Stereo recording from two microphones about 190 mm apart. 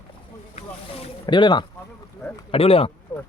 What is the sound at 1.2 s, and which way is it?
Speech, 25° left (ahead or behind).